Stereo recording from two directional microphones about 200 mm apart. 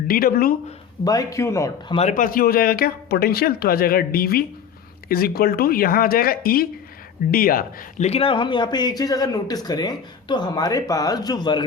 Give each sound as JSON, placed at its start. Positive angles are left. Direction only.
{"t": 0.1, "sound": "speech", "side_deg": 45}
{"t": 1.0, "sound": "speech", "side_deg": 20}
{"t": 2.0, "sound": "speech", "side_deg": 40}